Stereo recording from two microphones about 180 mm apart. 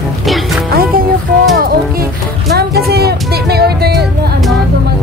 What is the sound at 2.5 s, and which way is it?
Speech, 65° right (ahead or behind).